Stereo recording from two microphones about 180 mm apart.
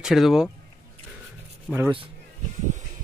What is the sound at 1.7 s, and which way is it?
Speech, 5° left (ahead or behind).